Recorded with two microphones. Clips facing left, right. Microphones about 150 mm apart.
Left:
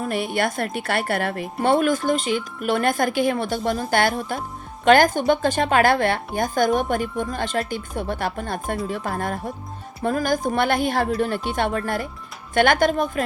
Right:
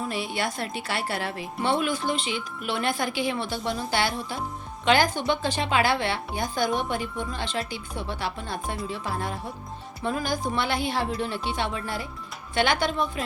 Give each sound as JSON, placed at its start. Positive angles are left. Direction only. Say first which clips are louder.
{"t": 0.0, "sound": "a woman's voice", "louder": "left 6 dB", "side_deg": 50}